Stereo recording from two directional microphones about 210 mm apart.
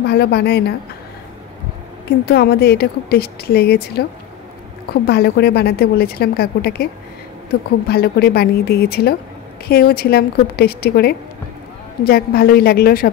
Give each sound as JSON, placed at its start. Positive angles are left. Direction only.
{"t": 0.0, "sound": "a woman's voice", "side_deg": 50}
{"t": 2.0, "sound": "a woman's voice", "side_deg": 50}
{"t": 5.0, "sound": "a woman's voice", "side_deg": 50}
{"t": 7.9, "sound": "a woman's voice", "side_deg": 45}